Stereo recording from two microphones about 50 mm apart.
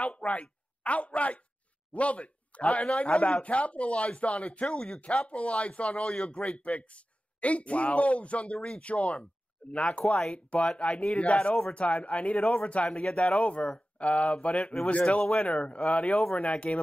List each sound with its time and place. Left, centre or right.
0.0 s speech: left